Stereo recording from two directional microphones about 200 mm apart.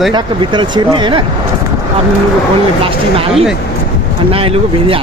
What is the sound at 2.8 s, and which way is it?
Speech, 25° right (ahead or behind).